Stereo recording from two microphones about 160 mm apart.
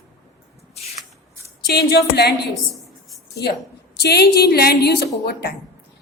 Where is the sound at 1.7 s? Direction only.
85° left.